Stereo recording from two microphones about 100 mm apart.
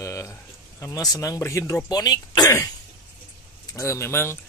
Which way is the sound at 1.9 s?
40° left (ahead or behind).